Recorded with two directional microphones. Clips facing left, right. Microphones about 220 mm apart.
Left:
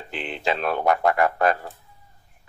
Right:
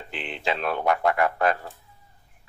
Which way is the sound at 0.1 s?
40° left (ahead or behind).